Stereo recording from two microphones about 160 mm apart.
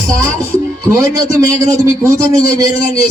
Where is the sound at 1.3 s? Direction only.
20° right (ahead or behind).